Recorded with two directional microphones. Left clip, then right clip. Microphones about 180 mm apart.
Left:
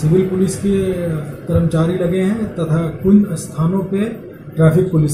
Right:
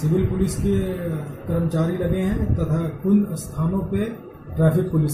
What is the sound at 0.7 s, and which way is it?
Speech, centre (ahead or behind).